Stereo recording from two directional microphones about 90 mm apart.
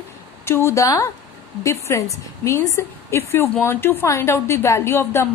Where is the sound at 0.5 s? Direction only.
30° left (ahead or behind).